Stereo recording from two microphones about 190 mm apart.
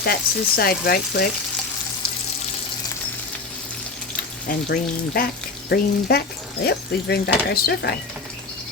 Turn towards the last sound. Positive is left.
turn(degrees=55)  # may be behind; listen again after turning